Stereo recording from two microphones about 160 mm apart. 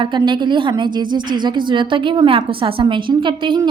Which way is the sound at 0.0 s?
30° right (ahead or behind).